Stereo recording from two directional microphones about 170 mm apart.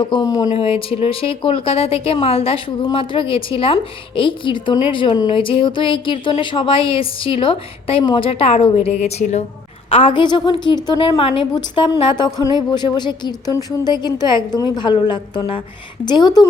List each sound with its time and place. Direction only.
0.0 s a woman's voice: 25° left (ahead or behind)
0.4 s a woman's voice: 35° left (ahead or behind)